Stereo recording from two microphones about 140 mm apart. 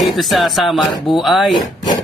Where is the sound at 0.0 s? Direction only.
Centre (ahead or behind).